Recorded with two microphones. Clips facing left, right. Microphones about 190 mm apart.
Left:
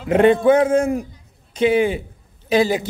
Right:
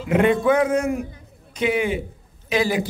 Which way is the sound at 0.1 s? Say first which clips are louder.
Left 4 dB; 35° left (ahead or behind).